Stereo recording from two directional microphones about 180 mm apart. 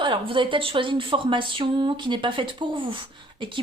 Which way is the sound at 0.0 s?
30° right (ahead or behind).